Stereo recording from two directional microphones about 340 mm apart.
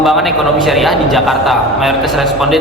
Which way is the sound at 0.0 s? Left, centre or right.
Centre.